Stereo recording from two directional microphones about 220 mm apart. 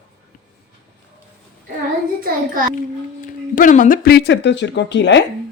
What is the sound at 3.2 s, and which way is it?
Speech, 35° left (ahead or behind).